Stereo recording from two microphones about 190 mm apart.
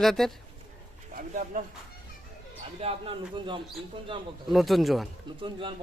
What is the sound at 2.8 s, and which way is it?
A man's voice, 30° right (ahead or behind).